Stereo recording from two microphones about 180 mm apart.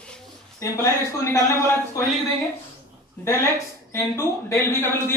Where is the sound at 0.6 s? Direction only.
15° left (ahead or behind).